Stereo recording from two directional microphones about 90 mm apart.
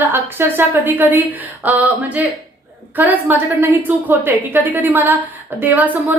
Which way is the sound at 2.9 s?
20° right (ahead or behind).